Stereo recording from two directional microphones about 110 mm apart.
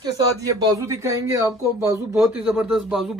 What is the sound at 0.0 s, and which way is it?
A man's voice, 35° right (ahead or behind).